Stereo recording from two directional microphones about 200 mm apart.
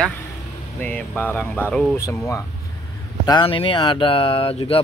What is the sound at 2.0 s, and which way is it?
Speech, 15° left (ahead or behind).